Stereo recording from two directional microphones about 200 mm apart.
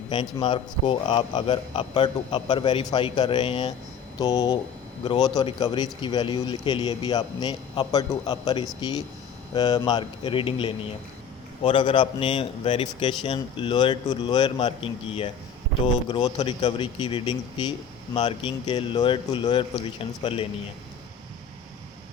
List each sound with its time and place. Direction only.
0.1 s speech: 20° left (ahead or behind)